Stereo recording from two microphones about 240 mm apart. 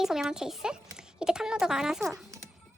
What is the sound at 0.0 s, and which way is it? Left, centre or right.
Speech, centre.